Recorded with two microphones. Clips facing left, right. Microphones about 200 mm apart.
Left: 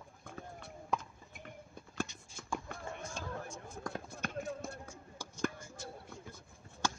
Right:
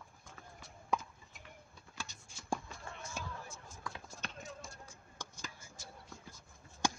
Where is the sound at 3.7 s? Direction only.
55° left (ahead or behind).